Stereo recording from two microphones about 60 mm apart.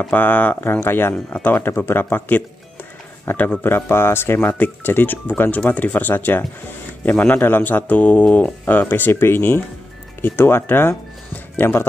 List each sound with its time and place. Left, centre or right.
0.1 s speech: left
0.6 s speech: left
3.6 s speech: left